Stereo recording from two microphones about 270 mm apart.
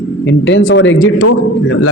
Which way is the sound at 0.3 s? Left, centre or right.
Left.